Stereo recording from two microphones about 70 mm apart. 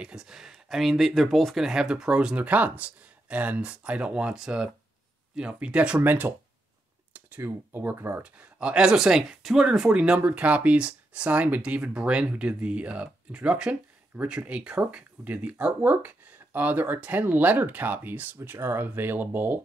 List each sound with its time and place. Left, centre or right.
0.0 s speech: centre
5.9 s speech: right
8.2 s speech: centre